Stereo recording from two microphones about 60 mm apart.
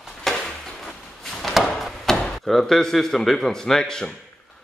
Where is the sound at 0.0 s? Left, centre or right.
Centre.